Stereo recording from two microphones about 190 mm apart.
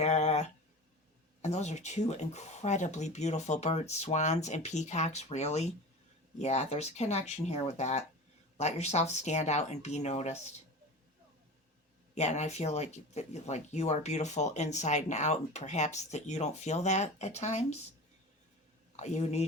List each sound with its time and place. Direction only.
0.0 s a sound: 35° left (ahead or behind)
1.4 s speech: 35° left (ahead or behind)
12.1 s speech: 40° left (ahead or behind)
18.9 s speech: 40° left (ahead or behind)